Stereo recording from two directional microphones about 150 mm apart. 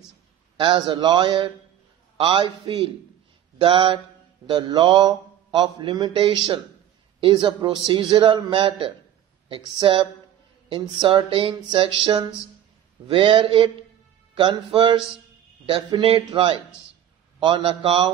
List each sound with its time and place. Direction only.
0.6 s mantra: 35° right (ahead or behind)
16.0 s mantra: 35° right (ahead or behind)